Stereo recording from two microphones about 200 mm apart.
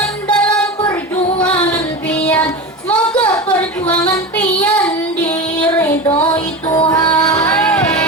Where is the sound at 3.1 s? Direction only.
20° left (ahead or behind).